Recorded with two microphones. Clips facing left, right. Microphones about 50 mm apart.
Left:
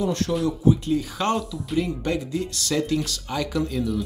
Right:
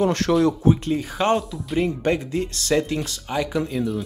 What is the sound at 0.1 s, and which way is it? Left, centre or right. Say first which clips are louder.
Speech: right 5 dB; right.